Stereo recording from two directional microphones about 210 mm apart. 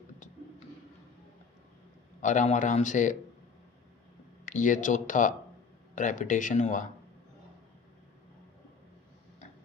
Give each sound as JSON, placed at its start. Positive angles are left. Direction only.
{"t": 2.2, "sound": "a man's voice", "side_deg": 35}
{"t": 4.4, "sound": "a man's voice", "side_deg": 35}